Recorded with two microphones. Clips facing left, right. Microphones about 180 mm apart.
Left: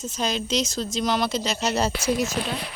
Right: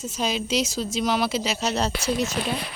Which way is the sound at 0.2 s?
5° right (ahead or behind).